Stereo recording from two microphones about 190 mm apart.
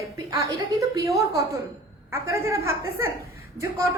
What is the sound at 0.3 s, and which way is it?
Speech, 20° right (ahead or behind).